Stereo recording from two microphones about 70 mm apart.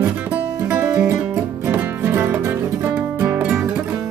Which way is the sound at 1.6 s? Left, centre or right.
Right.